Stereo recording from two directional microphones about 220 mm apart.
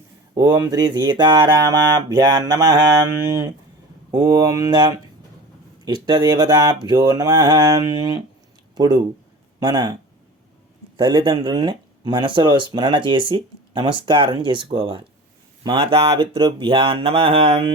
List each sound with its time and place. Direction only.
0.3 s a man's voice: 15° right (ahead or behind)